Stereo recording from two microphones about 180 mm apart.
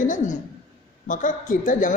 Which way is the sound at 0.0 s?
45° left (ahead or behind).